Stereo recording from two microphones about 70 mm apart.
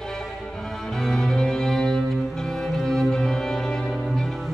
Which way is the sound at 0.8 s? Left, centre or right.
Centre.